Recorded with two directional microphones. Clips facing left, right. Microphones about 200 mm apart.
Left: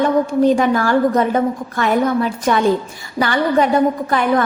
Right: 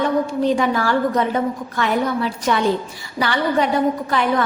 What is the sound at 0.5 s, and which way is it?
A woman's voice, 45° left (ahead or behind).